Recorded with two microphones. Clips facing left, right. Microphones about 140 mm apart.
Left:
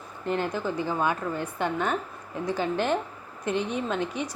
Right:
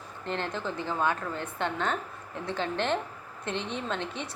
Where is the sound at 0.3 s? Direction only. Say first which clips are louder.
Left 5 dB; 10° left (ahead or behind).